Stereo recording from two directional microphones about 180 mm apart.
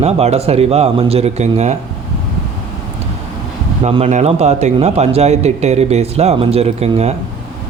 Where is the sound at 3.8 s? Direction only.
35° right (ahead or behind).